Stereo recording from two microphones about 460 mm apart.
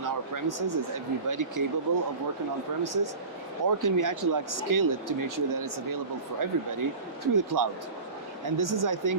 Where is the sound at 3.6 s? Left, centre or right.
Right.